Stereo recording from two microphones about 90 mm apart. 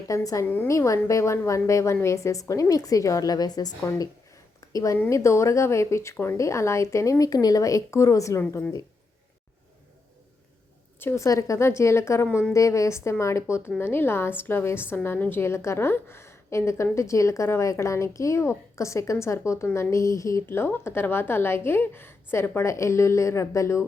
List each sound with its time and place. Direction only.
0.1 s a woman's voice: 40° left (ahead or behind)
0.4 s a woman's voice: 20° left (ahead or behind)
0.7 s a woman's voice: 35° left (ahead or behind)
8.4 s a woman's voice: 25° left (ahead or behind)
11.0 s a woman's voice: 35° left (ahead or behind)